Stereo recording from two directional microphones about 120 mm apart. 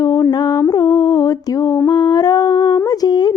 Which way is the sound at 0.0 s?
25° left (ahead or behind).